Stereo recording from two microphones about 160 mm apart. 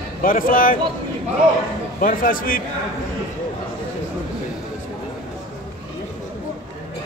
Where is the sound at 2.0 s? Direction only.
60° left (ahead or behind).